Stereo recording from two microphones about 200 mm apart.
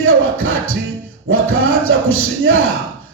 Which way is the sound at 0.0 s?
90° right.